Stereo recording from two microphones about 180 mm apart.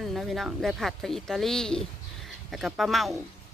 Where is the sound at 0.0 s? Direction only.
Centre (ahead or behind).